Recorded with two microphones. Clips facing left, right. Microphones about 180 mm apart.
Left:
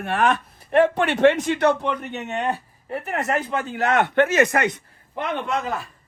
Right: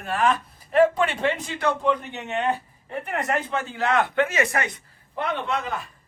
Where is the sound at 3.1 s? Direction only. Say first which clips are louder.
Left 2 dB; 45° left (ahead or behind).